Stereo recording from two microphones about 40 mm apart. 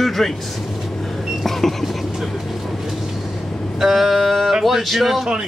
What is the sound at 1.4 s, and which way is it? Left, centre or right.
Vehicle, centre.